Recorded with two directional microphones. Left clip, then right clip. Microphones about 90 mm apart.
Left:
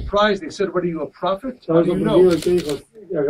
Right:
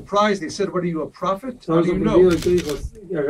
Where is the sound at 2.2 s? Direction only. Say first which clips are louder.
Left 1 dB; 20° left (ahead or behind).